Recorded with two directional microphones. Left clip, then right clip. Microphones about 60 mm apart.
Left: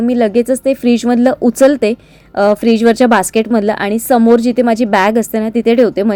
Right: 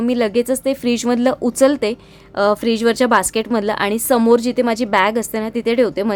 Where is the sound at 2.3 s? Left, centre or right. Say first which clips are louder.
Left 5 dB; left.